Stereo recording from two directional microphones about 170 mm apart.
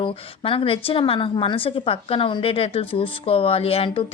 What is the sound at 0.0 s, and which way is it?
A woman's voice, 30° left (ahead or behind).